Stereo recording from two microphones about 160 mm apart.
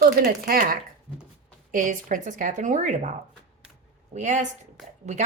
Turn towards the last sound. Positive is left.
turn(degrees=-45)  # may be behind; listen again after turning